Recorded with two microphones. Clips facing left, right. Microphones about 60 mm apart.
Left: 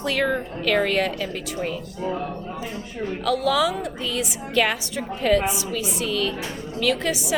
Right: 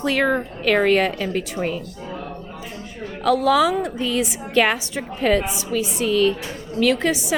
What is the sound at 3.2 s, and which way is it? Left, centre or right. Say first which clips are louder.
A woman's voice: right 5 dB; right.